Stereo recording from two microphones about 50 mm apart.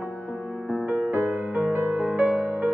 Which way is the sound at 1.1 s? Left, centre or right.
Right.